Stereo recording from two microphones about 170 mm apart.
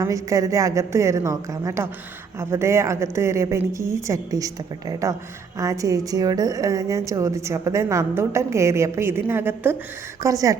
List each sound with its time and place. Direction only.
0.0 s a woman's voice: 20° right (ahead or behind)